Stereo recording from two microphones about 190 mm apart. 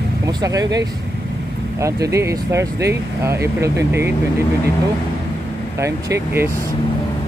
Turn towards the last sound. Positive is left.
turn(degrees=-15)  # may be behind; listen again after turning